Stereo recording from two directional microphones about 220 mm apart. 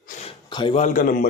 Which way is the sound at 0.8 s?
35° left (ahead or behind).